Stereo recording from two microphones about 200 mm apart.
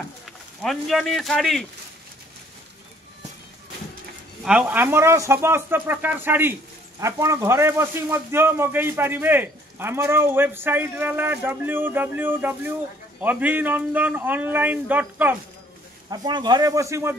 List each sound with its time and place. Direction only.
0.6 s a man's voice: centre (ahead or behind)
4.5 s speech: 5° right (ahead or behind)
16.1 s speech: 20° right (ahead or behind)